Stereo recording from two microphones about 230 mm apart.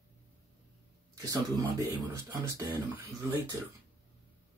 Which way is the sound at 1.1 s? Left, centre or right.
Centre.